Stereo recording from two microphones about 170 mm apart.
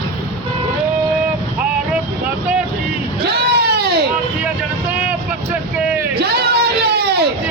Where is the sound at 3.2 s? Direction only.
70° right (ahead or behind).